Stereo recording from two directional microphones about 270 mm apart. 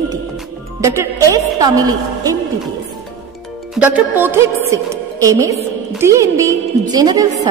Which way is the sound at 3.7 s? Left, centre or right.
Centre.